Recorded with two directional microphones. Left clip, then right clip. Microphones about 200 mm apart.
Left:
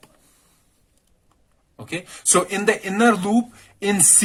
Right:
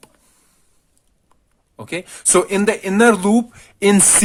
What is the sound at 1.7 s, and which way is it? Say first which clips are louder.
Speech: right 4 dB; 30° right (ahead or behind).